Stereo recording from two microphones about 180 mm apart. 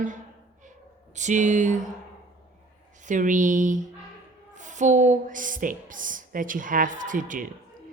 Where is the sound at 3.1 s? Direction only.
45° right (ahead or behind).